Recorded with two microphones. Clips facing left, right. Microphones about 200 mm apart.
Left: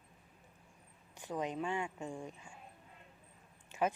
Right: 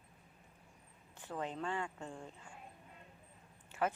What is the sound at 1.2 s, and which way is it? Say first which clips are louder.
A woman's voice: left 3 dB; 15° left (ahead or behind).